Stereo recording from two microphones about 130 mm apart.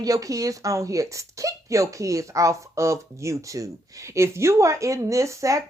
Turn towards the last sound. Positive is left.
turn(degrees=-25)  # may be behind; listen again after turning